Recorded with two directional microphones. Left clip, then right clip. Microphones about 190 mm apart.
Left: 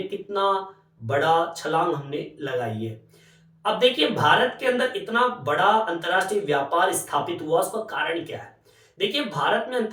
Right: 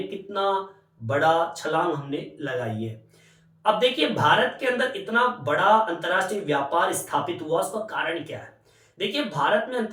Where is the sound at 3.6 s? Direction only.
15° left (ahead or behind).